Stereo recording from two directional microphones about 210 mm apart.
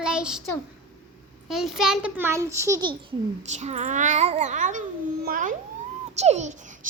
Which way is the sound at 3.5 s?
35° right (ahead or behind).